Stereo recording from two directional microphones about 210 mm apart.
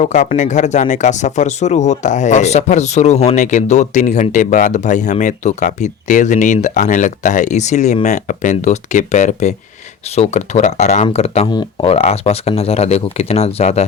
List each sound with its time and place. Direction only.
0.0 s speech: 35° left (ahead or behind)